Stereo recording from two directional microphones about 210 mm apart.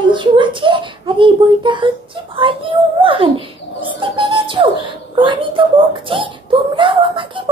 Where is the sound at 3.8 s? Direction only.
25° right (ahead or behind).